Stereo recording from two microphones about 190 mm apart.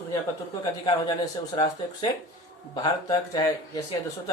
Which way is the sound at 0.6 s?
20° left (ahead or behind).